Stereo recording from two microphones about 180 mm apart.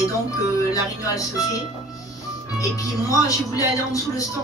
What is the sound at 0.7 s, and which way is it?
Speech, 20° left (ahead or behind).